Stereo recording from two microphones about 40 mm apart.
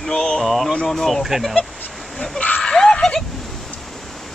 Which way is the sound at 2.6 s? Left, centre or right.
Left.